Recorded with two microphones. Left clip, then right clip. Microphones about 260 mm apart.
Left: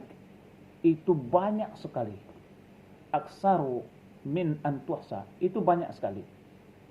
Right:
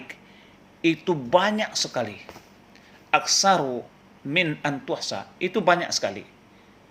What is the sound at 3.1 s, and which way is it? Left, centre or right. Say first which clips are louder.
Speech: right 7 dB; right.